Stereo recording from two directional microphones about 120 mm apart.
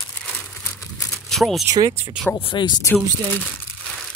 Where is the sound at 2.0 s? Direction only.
10° right (ahead or behind).